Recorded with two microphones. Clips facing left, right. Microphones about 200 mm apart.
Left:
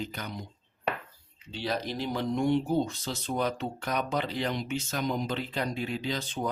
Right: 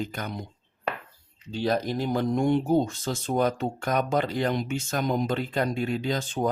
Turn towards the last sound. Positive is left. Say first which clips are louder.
# right 5 dB
turn(degrees=-45)  # may be behind; listen again after turning